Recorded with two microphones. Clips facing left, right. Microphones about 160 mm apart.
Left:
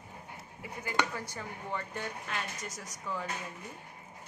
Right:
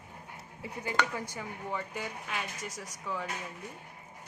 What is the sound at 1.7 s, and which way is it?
A woman's voice, 5° right (ahead or behind).